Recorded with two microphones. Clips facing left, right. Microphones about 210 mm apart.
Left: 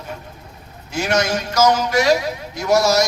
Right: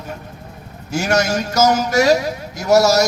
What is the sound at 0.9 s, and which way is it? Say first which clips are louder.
Speech: right 2 dB; 45° right (ahead or behind).